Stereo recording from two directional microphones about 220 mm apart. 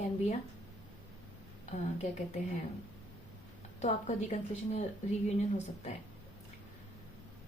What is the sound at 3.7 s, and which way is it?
A woman's voice, 30° left (ahead or behind).